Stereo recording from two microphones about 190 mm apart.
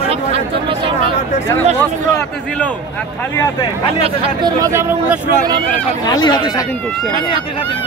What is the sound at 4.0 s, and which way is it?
Speech, 30° right (ahead or behind).